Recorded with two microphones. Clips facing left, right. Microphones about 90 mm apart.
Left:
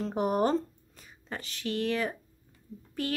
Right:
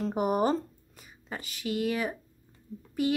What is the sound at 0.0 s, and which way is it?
A woman's voice, 5° right (ahead or behind).